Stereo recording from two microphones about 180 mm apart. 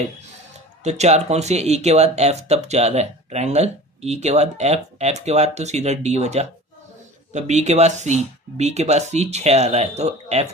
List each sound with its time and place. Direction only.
0.9 s speech: 40° right (ahead or behind)